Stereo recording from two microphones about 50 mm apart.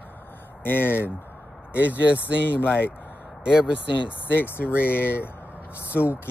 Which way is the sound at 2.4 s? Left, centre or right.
Left.